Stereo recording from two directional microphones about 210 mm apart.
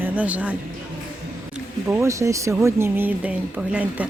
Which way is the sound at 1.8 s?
10° right (ahead or behind).